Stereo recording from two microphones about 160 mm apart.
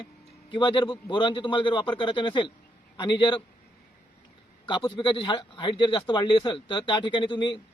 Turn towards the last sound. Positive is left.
turn(degrees=30)  # may be behind; listen again after turning